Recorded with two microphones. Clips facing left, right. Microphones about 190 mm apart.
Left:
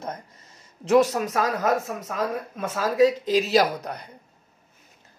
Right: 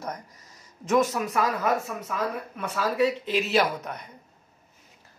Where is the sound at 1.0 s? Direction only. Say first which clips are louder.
Left 2 dB; 35° left (ahead or behind).